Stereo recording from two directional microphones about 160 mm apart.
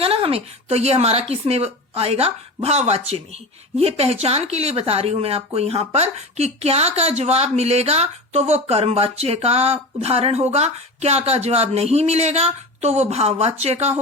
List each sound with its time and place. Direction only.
0.0 s speech: 35° right (ahead or behind)